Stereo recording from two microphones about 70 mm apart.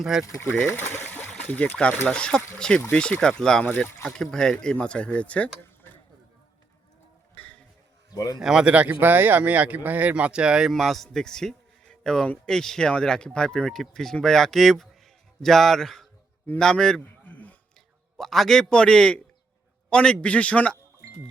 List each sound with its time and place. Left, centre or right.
0.0 s a man's voice: centre
0.4 s speech: centre
0.7 s a sound: left
1.5 s speech: left
3.6 s speech: left
4.0 s speech: centre
7.3 s music: centre
8.1 s speech: left
8.4 s speech: centre
8.7 s speech: centre
10.7 s a man's voice: centre
17.0 s a sound: left
18.2 s a man's voice: centre